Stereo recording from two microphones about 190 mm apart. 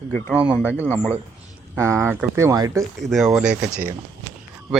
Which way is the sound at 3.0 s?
Centre (ahead or behind).